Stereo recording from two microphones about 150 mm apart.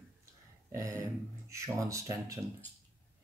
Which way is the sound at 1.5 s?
20° right (ahead or behind).